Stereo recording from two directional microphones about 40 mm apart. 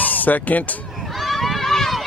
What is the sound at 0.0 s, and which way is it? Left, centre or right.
Speech, left.